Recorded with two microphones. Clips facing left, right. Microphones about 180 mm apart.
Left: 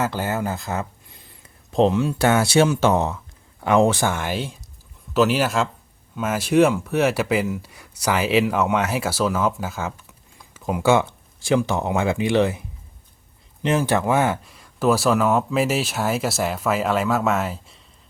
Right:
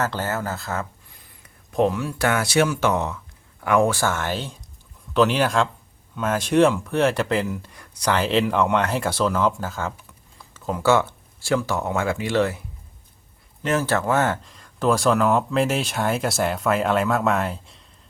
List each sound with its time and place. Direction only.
0.0 s speech: 10° left (ahead or behind)